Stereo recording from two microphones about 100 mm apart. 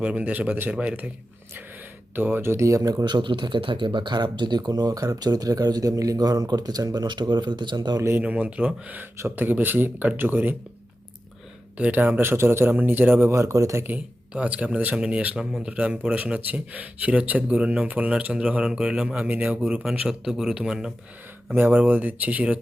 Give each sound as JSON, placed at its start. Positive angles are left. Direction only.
{"t": 0.0, "sound": "speech", "side_deg": -15}
{"t": 2.1, "sound": "speech", "side_deg": -20}
{"t": 8.2, "sound": "speech", "side_deg": -15}
{"t": 11.8, "sound": "speech", "side_deg": -15}
{"t": 13.8, "sound": "speech", "side_deg": -15}
{"t": 21.5, "sound": "speech", "side_deg": -20}